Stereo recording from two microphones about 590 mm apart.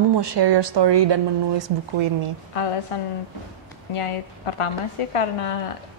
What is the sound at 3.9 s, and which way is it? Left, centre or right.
A woman's voice, left.